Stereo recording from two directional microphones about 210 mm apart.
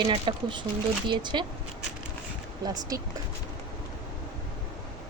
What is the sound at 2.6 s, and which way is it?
Speech, 20° right (ahead or behind).